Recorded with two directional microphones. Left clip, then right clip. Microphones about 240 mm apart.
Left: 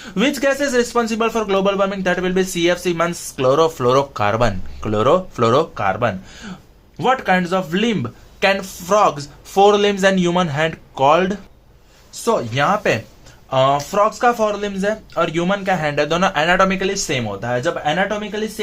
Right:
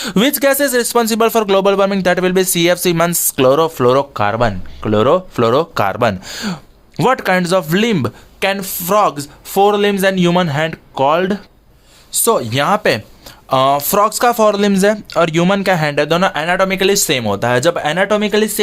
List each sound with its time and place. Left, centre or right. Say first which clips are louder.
0.0 s speech: right 4 dB; right
3.3 s speech: right 3 dB; right
5.8 s speech: right 4 dB; right
8.4 s speech: even; right
12.2 s speech: right 3 dB; right